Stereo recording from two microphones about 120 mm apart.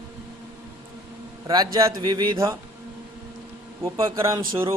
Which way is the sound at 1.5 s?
30° right (ahead or behind).